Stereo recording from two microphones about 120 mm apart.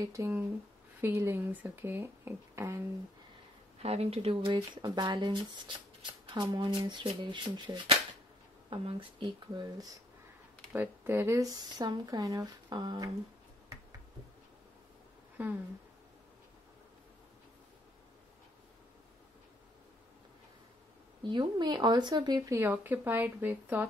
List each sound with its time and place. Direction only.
0.0 s speech: 25° right (ahead or behind)
3.8 s speech: 60° right (ahead or behind); by 9.9 s 35° right (ahead or behind)
10.7 s speech: 15° right (ahead or behind); by 13.1 s 35° right (ahead or behind)
15.4 s speech: 10° right (ahead or behind)
21.2 s speech: 40° right (ahead or behind)
22.6 s speech: 15° right (ahead or behind)